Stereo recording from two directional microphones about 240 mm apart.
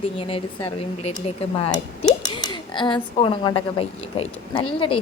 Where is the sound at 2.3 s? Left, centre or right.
Centre.